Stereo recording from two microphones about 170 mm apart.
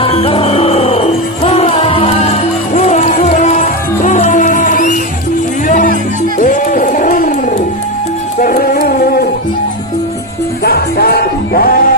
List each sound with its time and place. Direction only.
0.0 s music: 35° left (ahead or behind)
2.7 s music: 45° left (ahead or behind); by 9.3 s 65° left (ahead or behind)
10.6 s music: 65° left (ahead or behind)